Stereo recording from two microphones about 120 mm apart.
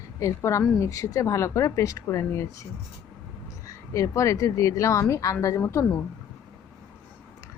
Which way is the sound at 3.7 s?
25° left (ahead or behind).